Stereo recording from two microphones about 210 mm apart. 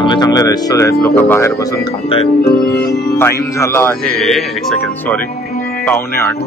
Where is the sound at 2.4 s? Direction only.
50° left (ahead or behind).